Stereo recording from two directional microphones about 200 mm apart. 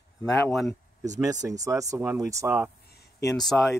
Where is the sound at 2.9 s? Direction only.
55° left (ahead or behind).